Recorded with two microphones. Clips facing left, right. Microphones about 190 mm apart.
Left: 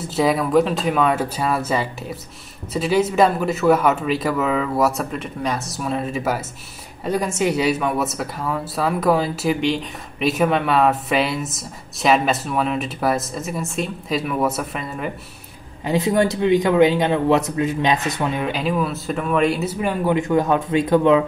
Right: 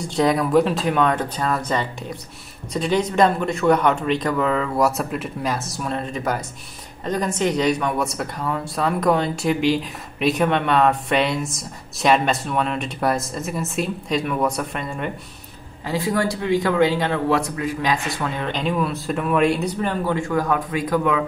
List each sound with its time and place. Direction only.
0.0 s speech: 5° left (ahead or behind)
15.8 s a man's voice: 20° left (ahead or behind)
18.5 s speech: 5° left (ahead or behind); by 21.2 s 25° left (ahead or behind)